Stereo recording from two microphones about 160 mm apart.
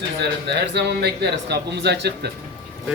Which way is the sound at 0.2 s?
90° right.